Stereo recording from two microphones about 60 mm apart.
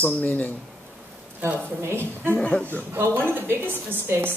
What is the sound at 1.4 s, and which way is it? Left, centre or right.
Speech, right.